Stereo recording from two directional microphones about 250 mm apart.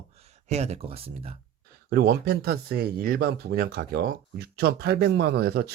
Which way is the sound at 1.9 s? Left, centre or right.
Right.